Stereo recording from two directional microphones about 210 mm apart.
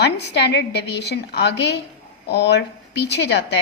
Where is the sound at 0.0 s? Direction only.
55° left (ahead or behind).